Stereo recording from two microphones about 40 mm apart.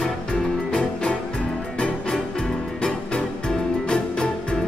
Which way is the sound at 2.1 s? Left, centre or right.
Centre.